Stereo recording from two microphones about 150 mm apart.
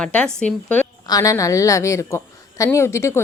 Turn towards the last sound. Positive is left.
turn(degrees=20)  # may be behind; listen again after turning